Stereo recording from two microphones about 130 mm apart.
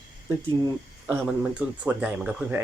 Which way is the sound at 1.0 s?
10° right (ahead or behind).